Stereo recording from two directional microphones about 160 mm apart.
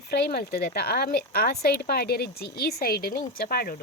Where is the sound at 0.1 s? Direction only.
90° left; by 3.8 s 70° left (ahead or behind).